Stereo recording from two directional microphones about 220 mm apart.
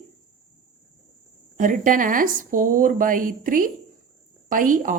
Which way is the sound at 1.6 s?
35° right (ahead or behind).